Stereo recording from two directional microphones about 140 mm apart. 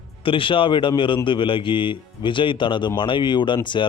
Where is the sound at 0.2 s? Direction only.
40° left (ahead or behind).